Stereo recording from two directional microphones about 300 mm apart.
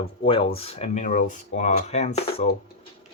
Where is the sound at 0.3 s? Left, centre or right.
Centre.